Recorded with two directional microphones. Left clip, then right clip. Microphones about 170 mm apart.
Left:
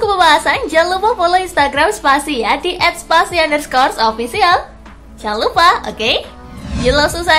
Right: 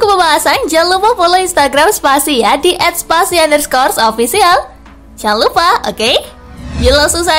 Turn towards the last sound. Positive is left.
turn(degrees=-30)  # may be behind; listen again after turning